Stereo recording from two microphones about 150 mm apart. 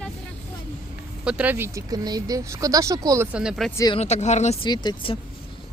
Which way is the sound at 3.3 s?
5° right (ahead or behind).